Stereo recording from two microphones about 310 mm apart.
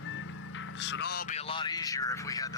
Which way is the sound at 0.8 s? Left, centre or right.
Left.